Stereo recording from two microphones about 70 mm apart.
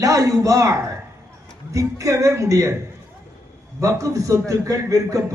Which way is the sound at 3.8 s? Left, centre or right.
Right.